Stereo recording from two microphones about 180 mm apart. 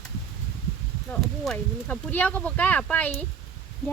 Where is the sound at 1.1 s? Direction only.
5° left (ahead or behind).